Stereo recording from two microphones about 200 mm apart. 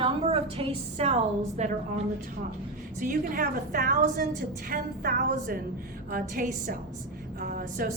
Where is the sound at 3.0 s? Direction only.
45° right (ahead or behind).